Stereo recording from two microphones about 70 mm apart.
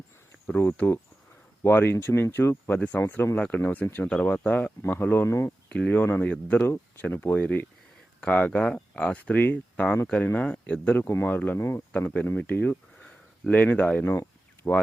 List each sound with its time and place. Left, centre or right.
0.5 s speech: left
2.7 s speech: left
5.6 s speech: left
11.1 s speech: left
11.3 s speech: left
11.6 s speech: left
12.0 s speech: left